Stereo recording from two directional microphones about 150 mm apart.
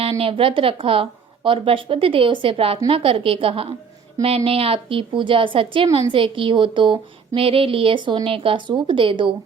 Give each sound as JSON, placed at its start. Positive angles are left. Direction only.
{"t": 0.2, "sound": "speech", "side_deg": -35}